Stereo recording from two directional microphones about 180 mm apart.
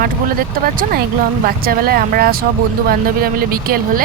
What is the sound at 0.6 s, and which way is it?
Speech, 55° right (ahead or behind).